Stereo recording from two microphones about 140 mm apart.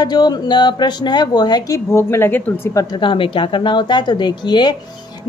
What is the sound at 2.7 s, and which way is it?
A woman's voice, 35° left (ahead or behind).